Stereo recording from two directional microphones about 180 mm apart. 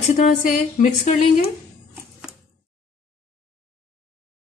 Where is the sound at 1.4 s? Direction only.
10° right (ahead or behind).